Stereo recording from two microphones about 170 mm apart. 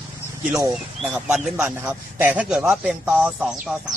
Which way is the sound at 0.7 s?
5° right (ahead or behind).